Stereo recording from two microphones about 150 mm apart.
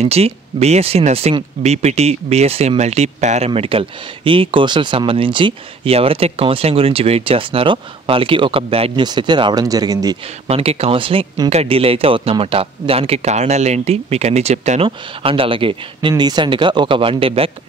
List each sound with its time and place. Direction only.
0.0 s speech: 45° right (ahead or behind); by 10.1 s 25° right (ahead or behind)
10.4 s speech: 40° right (ahead or behind)
14.9 s speech: 35° right (ahead or behind)